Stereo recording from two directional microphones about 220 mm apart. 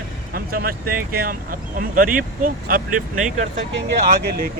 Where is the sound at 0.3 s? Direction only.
40° right (ahead or behind).